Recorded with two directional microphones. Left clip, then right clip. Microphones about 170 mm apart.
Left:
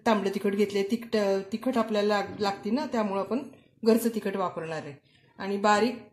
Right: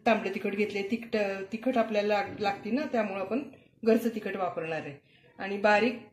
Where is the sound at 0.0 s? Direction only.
70° left (ahead or behind).